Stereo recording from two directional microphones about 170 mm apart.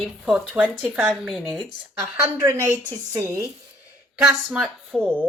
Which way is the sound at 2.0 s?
15° right (ahead or behind).